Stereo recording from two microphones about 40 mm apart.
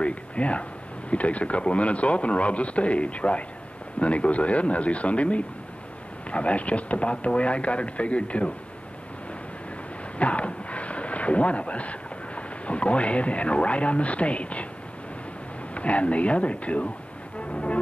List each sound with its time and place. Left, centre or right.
0.0 s speech: left
10.1 s speech: left
15.7 s speech: left
17.5 s music: left